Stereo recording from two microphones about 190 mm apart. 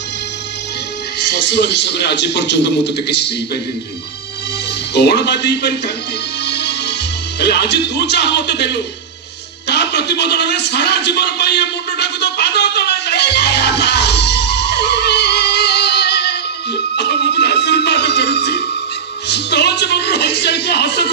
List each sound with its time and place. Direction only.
1.3 s a man's voice: 65° left (ahead or behind)
4.9 s a man's voice: 60° left (ahead or behind)
6.4 s music: 60° left (ahead or behind)
9.7 s a sound: 60° left (ahead or behind)
17.3 s music: 60° left (ahead or behind)
19.2 s a man's voice: 60° left (ahead or behind)